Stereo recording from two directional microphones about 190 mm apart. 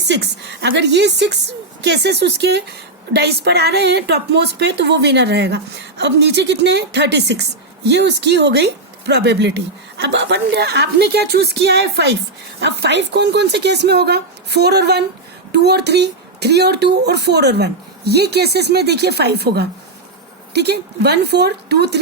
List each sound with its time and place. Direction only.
0.0 s a woman's voice: 65° right (ahead or behind)